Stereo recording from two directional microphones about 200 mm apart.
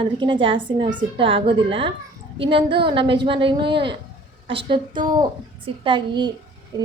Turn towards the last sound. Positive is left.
turn(degrees=-20)  # may be behind; listen again after turning